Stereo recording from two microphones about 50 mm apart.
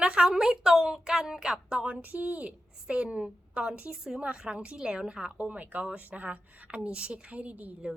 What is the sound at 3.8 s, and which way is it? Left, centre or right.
Speech, centre.